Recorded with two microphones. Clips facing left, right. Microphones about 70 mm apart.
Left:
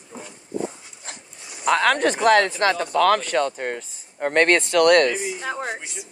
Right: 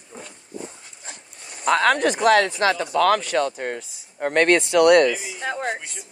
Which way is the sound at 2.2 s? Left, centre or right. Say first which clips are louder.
Even; left.